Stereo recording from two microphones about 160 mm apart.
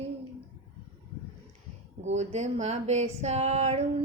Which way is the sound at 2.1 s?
45° right (ahead or behind).